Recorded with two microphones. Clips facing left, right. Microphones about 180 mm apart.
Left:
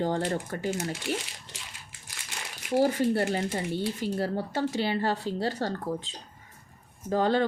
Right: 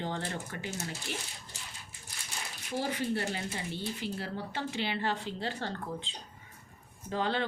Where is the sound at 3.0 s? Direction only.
40° left (ahead or behind).